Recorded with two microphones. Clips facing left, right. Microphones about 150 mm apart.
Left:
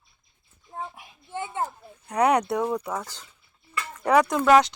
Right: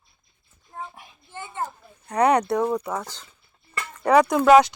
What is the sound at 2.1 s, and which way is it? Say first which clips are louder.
Speech: right 2 dB; 5° left (ahead or behind).